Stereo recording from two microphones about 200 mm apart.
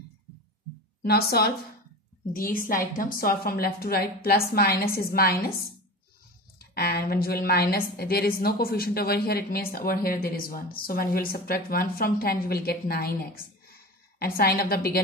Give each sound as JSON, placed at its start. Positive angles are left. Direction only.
{"t": 1.0, "sound": "a woman's voice", "side_deg": 50}